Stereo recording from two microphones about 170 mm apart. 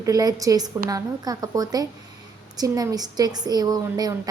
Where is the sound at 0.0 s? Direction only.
20° right (ahead or behind).